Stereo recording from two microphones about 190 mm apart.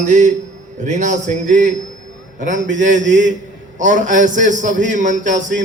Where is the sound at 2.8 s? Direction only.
40° right (ahead or behind).